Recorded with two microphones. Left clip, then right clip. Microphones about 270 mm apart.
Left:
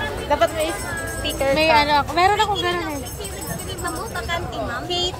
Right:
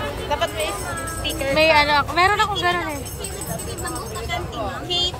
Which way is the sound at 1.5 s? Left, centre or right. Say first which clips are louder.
Right 1 dB; centre.